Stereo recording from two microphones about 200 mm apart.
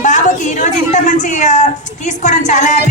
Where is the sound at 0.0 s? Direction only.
40° left (ahead or behind).